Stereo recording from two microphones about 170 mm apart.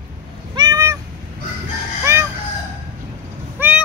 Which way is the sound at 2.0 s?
15° right (ahead or behind).